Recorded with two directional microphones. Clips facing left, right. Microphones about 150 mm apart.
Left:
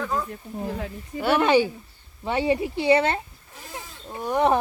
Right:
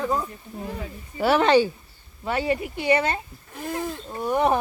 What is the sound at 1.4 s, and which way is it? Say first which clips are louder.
Speech: right 1 dB; 10° left (ahead or behind).